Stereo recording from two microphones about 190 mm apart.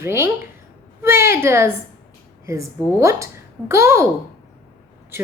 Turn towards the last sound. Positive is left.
turn(degrees=-15)  # may be behind; listen again after turning